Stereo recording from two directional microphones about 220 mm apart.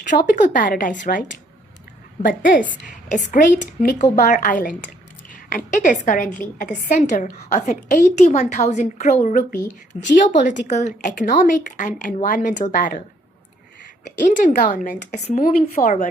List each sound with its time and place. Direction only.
0.1 s a woman's voice: 35° left (ahead or behind)
2.2 s a woman's voice: 40° left (ahead or behind)
4.3 s a woman's voice: 40° left (ahead or behind)
14.2 s a woman's voice: 35° left (ahead or behind)